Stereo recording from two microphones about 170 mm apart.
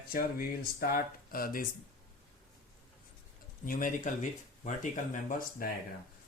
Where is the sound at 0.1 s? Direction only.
60° left (ahead or behind).